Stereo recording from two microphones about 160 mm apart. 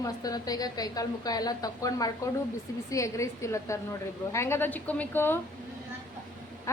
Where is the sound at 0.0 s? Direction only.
20° left (ahead or behind).